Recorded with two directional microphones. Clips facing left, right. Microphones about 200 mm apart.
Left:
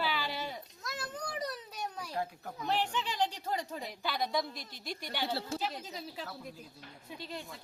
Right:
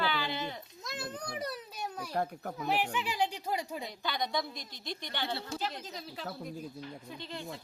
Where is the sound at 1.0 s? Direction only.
15° right (ahead or behind).